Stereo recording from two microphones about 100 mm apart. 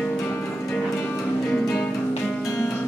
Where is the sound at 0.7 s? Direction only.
10° left (ahead or behind).